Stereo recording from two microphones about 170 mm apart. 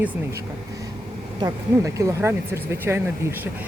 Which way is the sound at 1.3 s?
20° right (ahead or behind).